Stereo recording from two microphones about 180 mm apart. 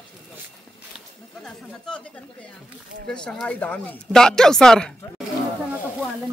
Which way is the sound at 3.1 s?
5° left (ahead or behind).